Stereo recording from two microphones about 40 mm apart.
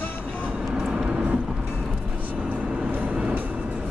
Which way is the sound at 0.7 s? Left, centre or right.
Right.